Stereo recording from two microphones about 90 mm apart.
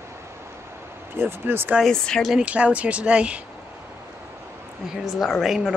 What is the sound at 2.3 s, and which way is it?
Speech, 15° right (ahead or behind).